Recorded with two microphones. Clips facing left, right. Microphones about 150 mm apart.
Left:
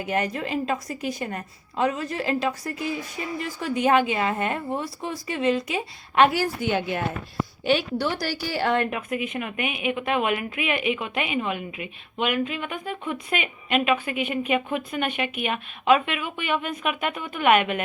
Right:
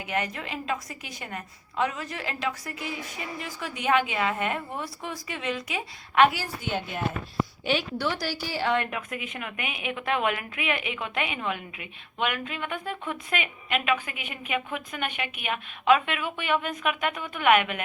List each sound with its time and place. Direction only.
0.1 s a woman's voice: 40° left (ahead or behind)
6.4 s a woman's voice: 80° left
7.6 s a woman's voice: 50° left (ahead or behind)
8.9 s a woman's voice: 25° left (ahead or behind)